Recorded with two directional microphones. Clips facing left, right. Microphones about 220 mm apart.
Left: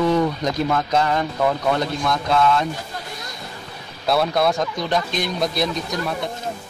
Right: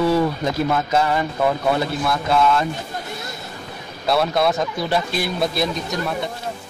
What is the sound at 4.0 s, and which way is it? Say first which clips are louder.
A man's voice: even; centre (ahead or behind).